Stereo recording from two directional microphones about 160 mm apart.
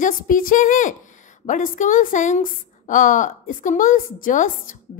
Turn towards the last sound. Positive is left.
turn(degrees=55)  # may be behind; listen again after turning